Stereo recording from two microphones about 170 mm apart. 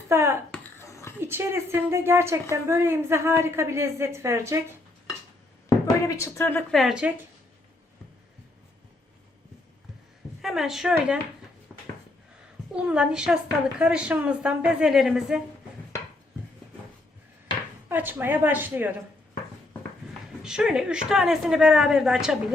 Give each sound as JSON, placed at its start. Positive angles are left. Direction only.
{"t": 0.1, "sound": "a sound", "side_deg": -15}
{"t": 0.5, "sound": "a sound", "side_deg": 15}
{"t": 1.2, "sound": "a woman's voice", "side_deg": -15}
{"t": 6.1, "sound": "speech", "side_deg": 15}
{"t": 6.7, "sound": "a woman's voice", "side_deg": 0}
{"t": 10.4, "sound": "a woman's voice", "side_deg": 0}
{"t": 11.7, "sound": "a sound", "side_deg": 0}
{"t": 12.7, "sound": "a woman's voice", "side_deg": -5}
{"t": 17.8, "sound": "a woman's voice", "side_deg": -10}
{"t": 20.4, "sound": "a woman's voice", "side_deg": -5}